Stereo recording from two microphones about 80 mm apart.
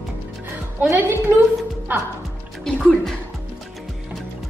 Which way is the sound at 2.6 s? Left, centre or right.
Centre.